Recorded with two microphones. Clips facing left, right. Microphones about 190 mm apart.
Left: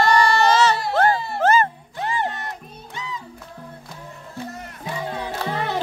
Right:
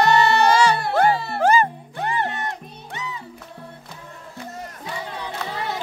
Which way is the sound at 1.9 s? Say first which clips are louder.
Even; 60° right (ahead or behind).